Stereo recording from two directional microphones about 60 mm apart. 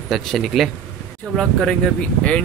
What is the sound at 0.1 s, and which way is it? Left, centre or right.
Speech, centre.